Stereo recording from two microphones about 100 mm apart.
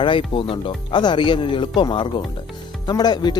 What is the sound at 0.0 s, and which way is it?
Speech, 55° left (ahead or behind).